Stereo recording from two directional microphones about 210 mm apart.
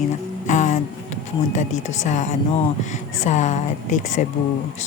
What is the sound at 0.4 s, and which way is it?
Music, 35° left (ahead or behind).